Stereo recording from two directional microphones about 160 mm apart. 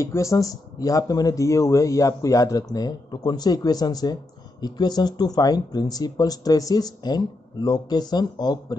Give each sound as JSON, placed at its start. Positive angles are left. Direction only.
{"t": 0.0, "sound": "speech", "side_deg": 20}